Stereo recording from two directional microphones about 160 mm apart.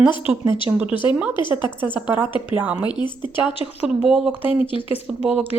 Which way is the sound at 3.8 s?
Centre (ahead or behind).